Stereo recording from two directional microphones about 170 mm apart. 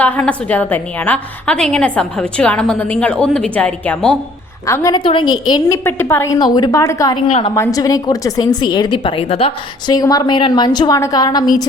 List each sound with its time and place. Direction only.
0.0 s a woman's voice: 10° left (ahead or behind)
4.6 s a woman's voice: 15° left (ahead or behind)
4.9 s a woman's voice: 30° left (ahead or behind)
9.9 s a woman's voice: 20° left (ahead or behind)